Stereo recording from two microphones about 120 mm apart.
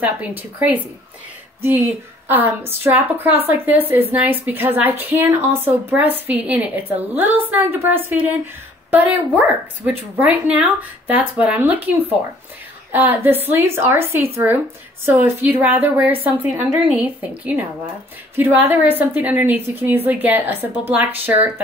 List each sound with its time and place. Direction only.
0.0 s a woman's voice: 15° right (ahead or behind)
2.2 s a woman's voice: 15° right (ahead or behind)
18.3 s a woman's voice: 15° right (ahead or behind)